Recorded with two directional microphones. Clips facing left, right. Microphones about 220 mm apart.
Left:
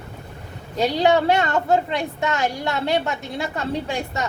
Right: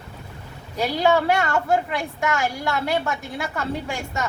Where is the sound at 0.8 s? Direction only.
20° left (ahead or behind).